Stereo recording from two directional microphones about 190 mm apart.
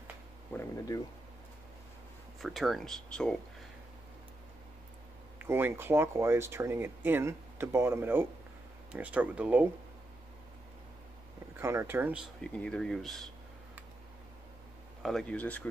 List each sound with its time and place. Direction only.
0.5 s speech: 20° left (ahead or behind)
2.4 s speech: centre (ahead or behind)
5.4 s speech: 10° right (ahead or behind)
11.5 s speech: 15° right (ahead or behind)
12.5 s speech: 5° left (ahead or behind)
15.0 s speech: centre (ahead or behind)